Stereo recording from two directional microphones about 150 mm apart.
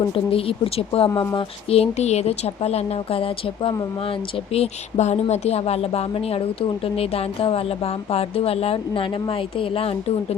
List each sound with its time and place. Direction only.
0.0 s a woman's voice: 35° left (ahead or behind)
1.1 s speech: 20° left (ahead or behind)
1.4 s a woman's voice: 40° left (ahead or behind)
4.5 s a woman's voice: 45° left (ahead or behind)